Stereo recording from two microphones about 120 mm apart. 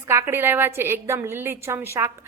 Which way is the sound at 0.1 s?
20° right (ahead or behind).